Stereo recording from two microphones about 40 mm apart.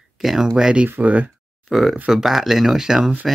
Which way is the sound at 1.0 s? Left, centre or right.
Right.